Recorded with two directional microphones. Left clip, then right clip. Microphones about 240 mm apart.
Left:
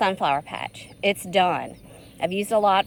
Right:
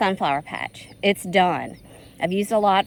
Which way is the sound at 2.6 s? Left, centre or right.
Centre.